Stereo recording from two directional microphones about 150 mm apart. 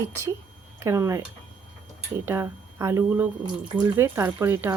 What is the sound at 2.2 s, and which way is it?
Speech, 15° right (ahead or behind).